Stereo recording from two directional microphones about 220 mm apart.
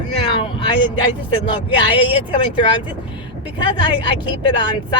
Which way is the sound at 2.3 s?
20° left (ahead or behind).